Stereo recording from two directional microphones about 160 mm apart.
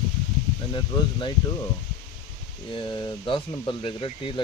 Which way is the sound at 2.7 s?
30° left (ahead or behind).